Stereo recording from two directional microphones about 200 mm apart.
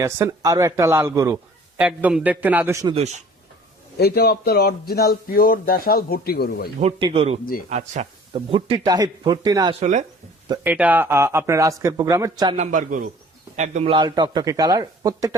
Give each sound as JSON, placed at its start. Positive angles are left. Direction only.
{"t": 0.0, "sound": "speech", "side_deg": -15}
{"t": 2.9, "sound": "a man's voice", "side_deg": -35}
{"t": 3.9, "sound": "speech", "side_deg": 50}
{"t": 6.8, "sound": "speech", "side_deg": -30}
{"t": 9.8, "sound": "a man's voice", "side_deg": -35}
{"t": 10.6, "sound": "speech", "side_deg": -10}
{"t": 12.5, "sound": "a man's voice", "side_deg": -40}